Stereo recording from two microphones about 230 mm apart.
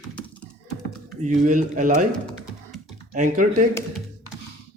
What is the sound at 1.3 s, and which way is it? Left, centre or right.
Speech, right.